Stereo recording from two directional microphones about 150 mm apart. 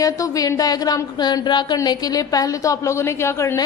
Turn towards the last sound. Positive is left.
turn(degrees=20)  # may be behind; listen again after turning